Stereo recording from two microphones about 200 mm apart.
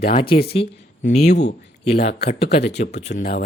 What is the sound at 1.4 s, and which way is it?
Speech, 55° left (ahead or behind).